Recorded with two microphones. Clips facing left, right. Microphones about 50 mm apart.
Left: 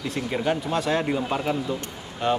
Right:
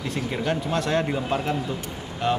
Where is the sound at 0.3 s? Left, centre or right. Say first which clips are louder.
Left 1 dB; centre.